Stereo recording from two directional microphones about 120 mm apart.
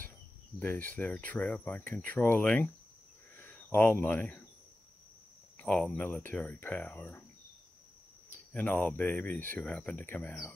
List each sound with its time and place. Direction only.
0.6 s speech: 15° left (ahead or behind)
5.6 s speech: 5° left (ahead or behind)
8.5 s speech: 15° left (ahead or behind)